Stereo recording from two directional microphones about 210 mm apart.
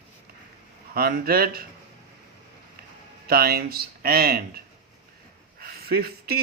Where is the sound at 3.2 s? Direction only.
45° right (ahead or behind).